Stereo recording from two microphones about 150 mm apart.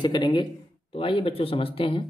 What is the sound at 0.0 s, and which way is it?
Speech, 30° left (ahead or behind).